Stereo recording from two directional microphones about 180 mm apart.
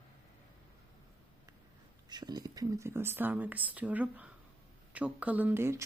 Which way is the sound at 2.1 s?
25° right (ahead or behind).